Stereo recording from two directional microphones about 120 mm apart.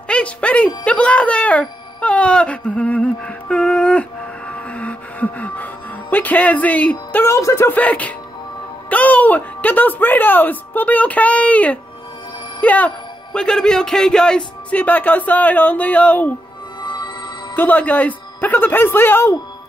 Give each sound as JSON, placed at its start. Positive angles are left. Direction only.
{"t": 0.1, "sound": "music", "side_deg": 10}
{"t": 8.9, "sound": "speech", "side_deg": 10}
{"t": 16.8, "sound": "music", "side_deg": 40}
{"t": 17.6, "sound": "speech", "side_deg": 15}